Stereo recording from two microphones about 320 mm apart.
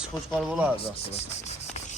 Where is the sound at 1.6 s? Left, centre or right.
Left.